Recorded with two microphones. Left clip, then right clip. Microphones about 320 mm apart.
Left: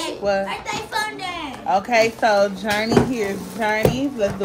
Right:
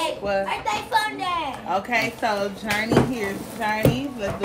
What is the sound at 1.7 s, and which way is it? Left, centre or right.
Speech, left.